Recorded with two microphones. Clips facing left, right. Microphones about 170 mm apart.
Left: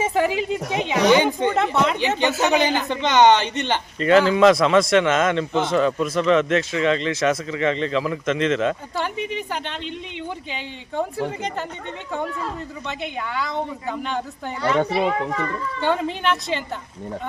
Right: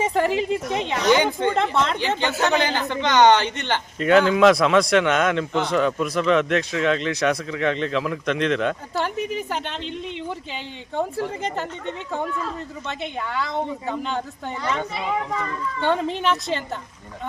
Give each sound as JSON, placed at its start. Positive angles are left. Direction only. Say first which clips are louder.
{"t": 0.0, "sound": "speech", "louder": "even", "side_deg": 0}
{"t": 1.0, "sound": "speech", "louder": "left 2 dB", "side_deg": 15}
{"t": 1.5, "sound": "speech", "louder": "left 2 dB", "side_deg": 5}
{"t": 4.0, "sound": "speech", "louder": "left 1 dB", "side_deg": 0}
{"t": 12.9, "sound": "speech", "louder": "even", "side_deg": 0}
{"t": 14.8, "sound": "a child's voice", "louder": "left 8 dB", "side_deg": 70}
{"t": 15.8, "sound": "speech", "louder": "even", "side_deg": 0}